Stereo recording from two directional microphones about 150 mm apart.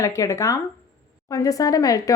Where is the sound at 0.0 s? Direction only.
20° left (ahead or behind).